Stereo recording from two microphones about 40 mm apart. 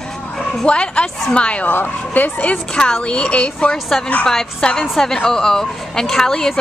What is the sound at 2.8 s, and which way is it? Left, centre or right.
A woman's voice, left.